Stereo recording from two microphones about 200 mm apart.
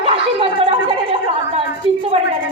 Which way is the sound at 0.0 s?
30° right (ahead or behind).